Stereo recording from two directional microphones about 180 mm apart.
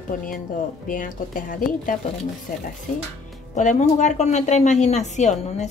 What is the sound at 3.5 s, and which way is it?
A woman's voice, 40° left (ahead or behind).